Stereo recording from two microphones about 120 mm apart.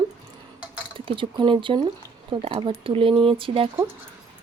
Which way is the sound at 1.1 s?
45° right (ahead or behind).